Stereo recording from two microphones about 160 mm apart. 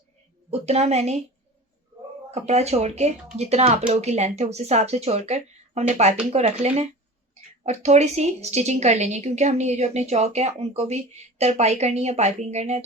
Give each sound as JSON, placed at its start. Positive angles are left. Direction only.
{"t": 0.5, "sound": "a woman's voice", "side_deg": -40}
{"t": 2.3, "sound": "a woman's voice", "side_deg": -45}